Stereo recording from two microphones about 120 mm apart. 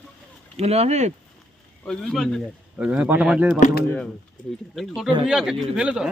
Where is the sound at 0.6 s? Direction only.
60° right (ahead or behind).